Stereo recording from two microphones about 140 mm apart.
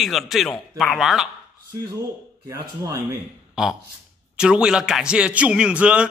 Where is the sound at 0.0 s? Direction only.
Centre (ahead or behind).